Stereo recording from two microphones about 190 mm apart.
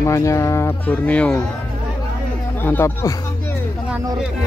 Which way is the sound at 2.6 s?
10° left (ahead or behind).